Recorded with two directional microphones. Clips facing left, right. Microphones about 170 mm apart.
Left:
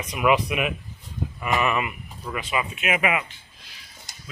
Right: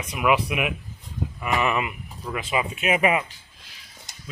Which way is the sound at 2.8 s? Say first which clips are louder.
Right 3 dB; 35° right (ahead or behind).